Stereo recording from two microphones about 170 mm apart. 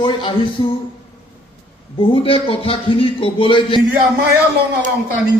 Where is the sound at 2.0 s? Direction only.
30° left (ahead or behind).